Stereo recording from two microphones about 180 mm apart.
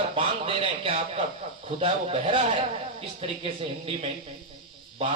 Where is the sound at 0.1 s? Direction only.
30° right (ahead or behind).